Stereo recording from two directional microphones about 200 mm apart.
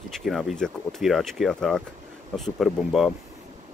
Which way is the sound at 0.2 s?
Centre (ahead or behind).